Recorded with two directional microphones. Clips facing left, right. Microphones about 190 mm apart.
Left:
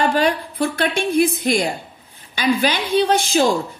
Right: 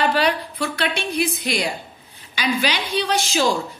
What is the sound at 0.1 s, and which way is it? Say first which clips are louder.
A woman's voice: left 2 dB; 50° left (ahead or behind).